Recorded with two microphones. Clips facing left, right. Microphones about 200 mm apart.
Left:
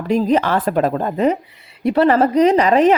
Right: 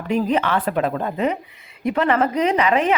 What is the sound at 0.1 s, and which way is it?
A woman's voice, 40° left (ahead or behind).